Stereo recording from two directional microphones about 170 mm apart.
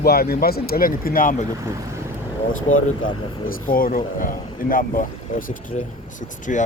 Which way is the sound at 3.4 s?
55° left (ahead or behind).